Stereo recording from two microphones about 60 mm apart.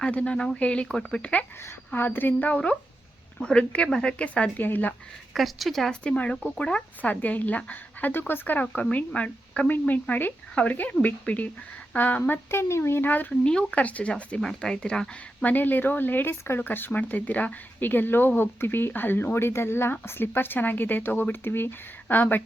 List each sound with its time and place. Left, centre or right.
0.0 s speech: left
1.9 s speech: left; by 4.5 s centre
4.5 s speech: left
5.3 s speech: centre
6.0 s speech: centre
12.5 s speech: left
13.3 s speech: centre
15.4 s speech: left